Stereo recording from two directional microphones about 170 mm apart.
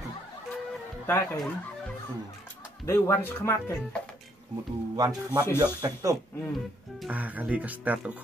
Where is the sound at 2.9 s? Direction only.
15° left (ahead or behind).